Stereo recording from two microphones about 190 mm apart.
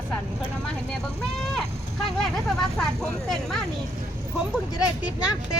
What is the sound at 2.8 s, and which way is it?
Vehicle, 5° left (ahead or behind).